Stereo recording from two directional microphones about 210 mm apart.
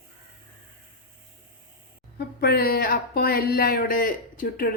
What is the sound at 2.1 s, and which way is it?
Speech, 50° left (ahead or behind).